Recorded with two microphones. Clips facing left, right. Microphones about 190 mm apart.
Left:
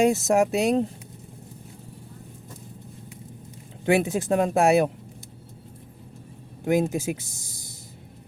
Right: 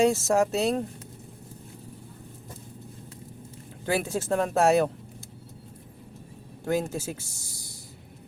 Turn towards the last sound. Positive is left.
turn(degrees=20)  # may be behind; listen again after turning